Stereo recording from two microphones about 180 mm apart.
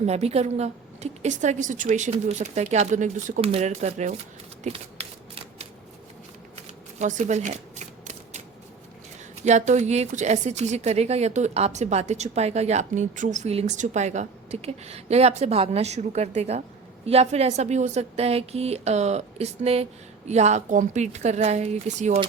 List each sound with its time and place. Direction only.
0.0 s speech: 35° right (ahead or behind)
4.6 s typewriter: 35° right (ahead or behind)
7.0 s shuffling cards: 40° right (ahead or behind)
9.4 s speech: 40° right (ahead or behind)